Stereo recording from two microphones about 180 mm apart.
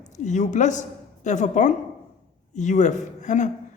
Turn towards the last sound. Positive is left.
turn(degrees=40)  # may be behind; listen again after turning